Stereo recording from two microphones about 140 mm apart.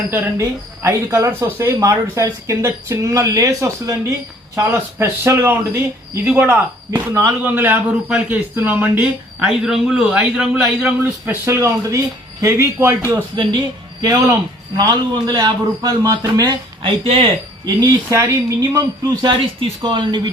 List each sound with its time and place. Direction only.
0.1 s a man's voice: 20° right (ahead or behind)
11.4 s speech: 20° right (ahead or behind)
13.3 s speech: 30° right (ahead or behind)
17.0 s speech: 45° right (ahead or behind)
17.7 s speech: 20° right (ahead or behind)
19.2 s speech: 35° right (ahead or behind)